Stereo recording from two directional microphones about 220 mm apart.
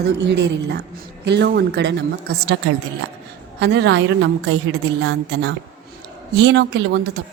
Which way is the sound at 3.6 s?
50° right (ahead or behind).